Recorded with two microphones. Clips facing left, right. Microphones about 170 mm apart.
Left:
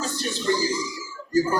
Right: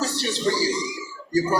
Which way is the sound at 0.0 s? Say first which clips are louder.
Right 3 dB; 80° right.